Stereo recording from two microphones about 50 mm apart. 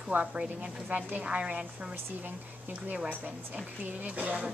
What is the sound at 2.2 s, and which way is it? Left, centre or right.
Speech, right.